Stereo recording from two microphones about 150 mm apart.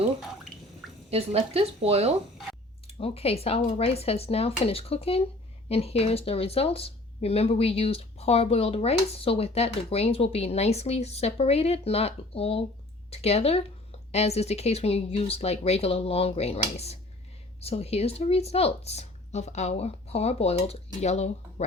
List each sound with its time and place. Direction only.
1.1 s speech: 45° right (ahead or behind)
2.8 s speech: 40° left (ahead or behind)